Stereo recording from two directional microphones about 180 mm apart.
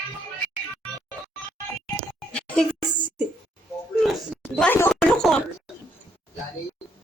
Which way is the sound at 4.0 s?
Centre (ahead or behind).